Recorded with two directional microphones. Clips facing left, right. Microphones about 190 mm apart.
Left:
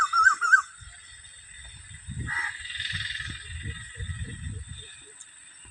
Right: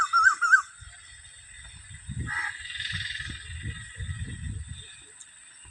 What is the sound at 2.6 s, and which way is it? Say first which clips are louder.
Frog: even; 45° right (ahead or behind).